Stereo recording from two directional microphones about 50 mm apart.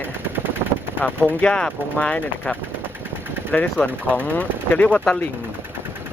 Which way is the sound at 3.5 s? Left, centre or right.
Left.